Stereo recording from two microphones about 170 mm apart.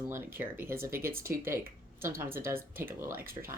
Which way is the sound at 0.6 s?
15° right (ahead or behind).